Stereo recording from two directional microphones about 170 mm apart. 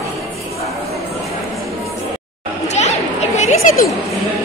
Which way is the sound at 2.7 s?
40° left (ahead or behind).